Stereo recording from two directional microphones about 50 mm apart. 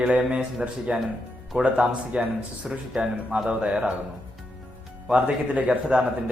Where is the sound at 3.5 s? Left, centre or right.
Right.